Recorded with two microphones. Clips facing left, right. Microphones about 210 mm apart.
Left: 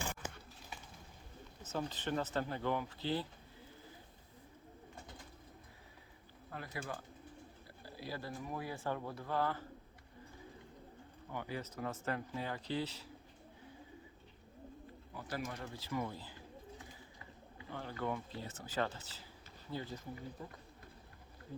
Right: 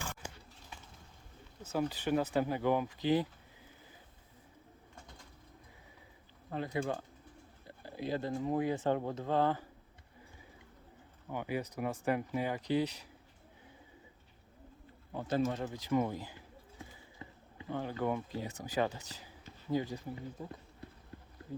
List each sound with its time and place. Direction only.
1.6 s speech: 10° right (ahead or behind)
6.5 s speech: 25° right (ahead or behind)
11.3 s speech: 15° right (ahead or behind)
15.1 s speech: 25° right (ahead or behind)
17.7 s speech: 15° right (ahead or behind)